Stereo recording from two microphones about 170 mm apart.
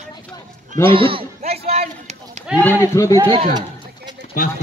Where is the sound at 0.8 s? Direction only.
30° right (ahead or behind).